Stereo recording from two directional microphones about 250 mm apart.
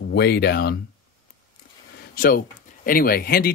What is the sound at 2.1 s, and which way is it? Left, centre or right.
Speech, left.